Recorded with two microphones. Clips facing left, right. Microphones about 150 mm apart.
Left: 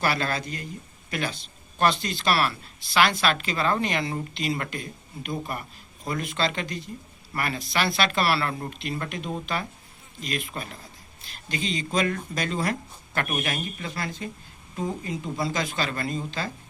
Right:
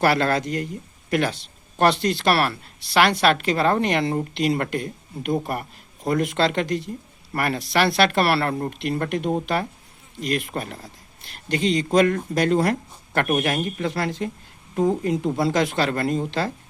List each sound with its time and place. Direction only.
0.0 s speech: 70° right (ahead or behind)
7.3 s speech: 60° right (ahead or behind)